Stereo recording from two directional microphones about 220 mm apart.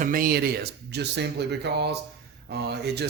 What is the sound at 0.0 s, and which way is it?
A man's voice, 40° right (ahead or behind).